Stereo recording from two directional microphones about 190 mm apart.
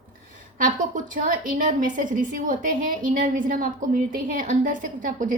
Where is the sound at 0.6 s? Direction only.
45° right (ahead or behind).